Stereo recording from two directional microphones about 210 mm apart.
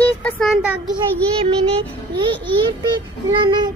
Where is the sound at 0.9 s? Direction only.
25° right (ahead or behind).